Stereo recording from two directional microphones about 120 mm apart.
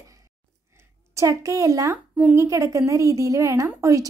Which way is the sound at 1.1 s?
25° right (ahead or behind).